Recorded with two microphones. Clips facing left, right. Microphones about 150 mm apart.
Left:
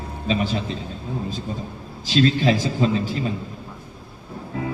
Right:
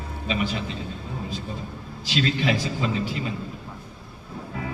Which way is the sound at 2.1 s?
40° left (ahead or behind).